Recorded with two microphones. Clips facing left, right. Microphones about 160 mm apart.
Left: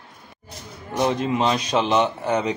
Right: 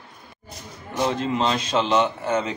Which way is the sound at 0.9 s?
15° left (ahead or behind).